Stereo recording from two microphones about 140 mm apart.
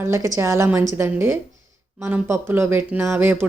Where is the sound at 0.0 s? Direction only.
20° right (ahead or behind).